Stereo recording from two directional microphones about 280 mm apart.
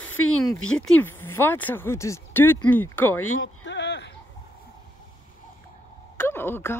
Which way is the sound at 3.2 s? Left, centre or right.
Left.